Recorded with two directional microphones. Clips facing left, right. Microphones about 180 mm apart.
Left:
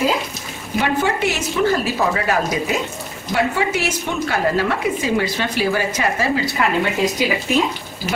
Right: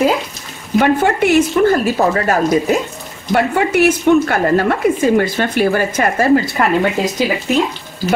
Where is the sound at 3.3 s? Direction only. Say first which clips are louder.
Right 6 dB; 55° right (ahead or behind).